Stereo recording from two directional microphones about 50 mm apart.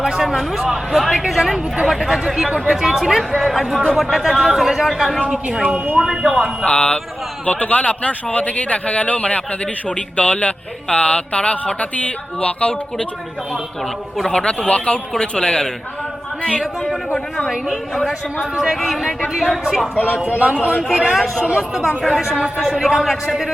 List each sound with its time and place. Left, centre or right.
0.0 s speech: centre
5.7 s speech: right
6.0 s speech: centre
6.7 s speech: left
14.3 s a man's voice: centre
17.9 s speech: centre
18.5 s speech: centre
19.5 s speech: centre
20.4 s speech: right
21.1 s speech: centre
21.4 s speech: centre
22.8 s speech: centre